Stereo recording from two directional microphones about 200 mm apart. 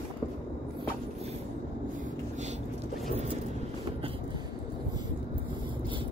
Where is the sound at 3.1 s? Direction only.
35° right (ahead or behind).